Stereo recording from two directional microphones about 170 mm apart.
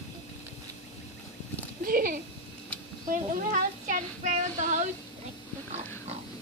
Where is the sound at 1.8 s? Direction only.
55° right (ahead or behind).